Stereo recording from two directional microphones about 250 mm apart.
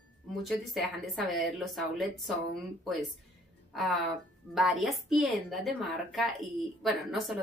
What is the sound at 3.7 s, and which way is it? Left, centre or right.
Speech, centre.